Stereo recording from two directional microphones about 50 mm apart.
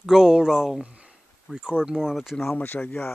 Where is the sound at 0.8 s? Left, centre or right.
Right.